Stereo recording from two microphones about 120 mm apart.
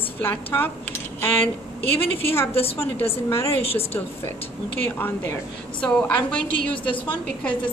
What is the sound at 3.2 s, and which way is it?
Speech, 20° left (ahead or behind).